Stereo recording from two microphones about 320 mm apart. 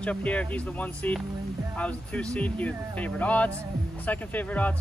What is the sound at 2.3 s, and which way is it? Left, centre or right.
Speech, centre.